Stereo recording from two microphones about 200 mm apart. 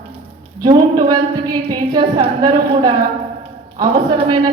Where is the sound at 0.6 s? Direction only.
20° right (ahead or behind).